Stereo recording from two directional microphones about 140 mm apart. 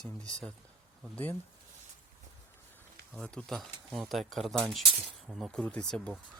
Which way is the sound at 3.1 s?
5° left (ahead or behind).